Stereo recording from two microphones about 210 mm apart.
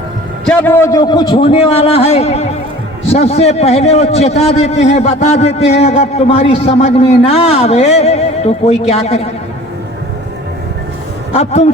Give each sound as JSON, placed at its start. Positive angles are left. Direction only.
{"t": 0.4, "sound": "a man's voice", "side_deg": 10}
{"t": 11.3, "sound": "a man's voice", "side_deg": 30}